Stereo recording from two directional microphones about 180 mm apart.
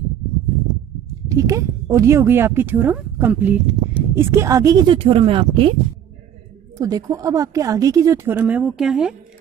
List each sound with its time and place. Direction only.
1.3 s speech: 20° right (ahead or behind)
6.8 s speech: 20° right (ahead or behind); by 9.1 s 5° right (ahead or behind)